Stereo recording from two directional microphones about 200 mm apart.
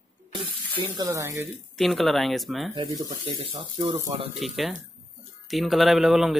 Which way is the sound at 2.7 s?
20° right (ahead or behind).